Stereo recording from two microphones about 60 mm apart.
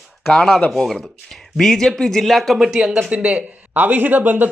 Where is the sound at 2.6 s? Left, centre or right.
Centre.